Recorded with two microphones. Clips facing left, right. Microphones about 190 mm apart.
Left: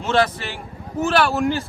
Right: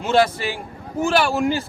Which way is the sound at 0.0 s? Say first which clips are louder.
Right 2 dB; 10° right (ahead or behind).